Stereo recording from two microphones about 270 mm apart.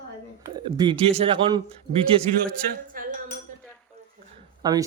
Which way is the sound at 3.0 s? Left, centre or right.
Right.